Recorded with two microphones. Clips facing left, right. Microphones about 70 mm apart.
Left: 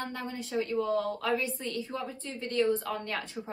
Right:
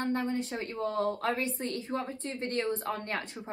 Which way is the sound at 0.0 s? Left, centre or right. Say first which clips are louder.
Right 6 dB; right.